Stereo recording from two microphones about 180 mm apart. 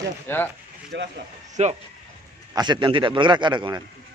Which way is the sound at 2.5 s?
25° right (ahead or behind).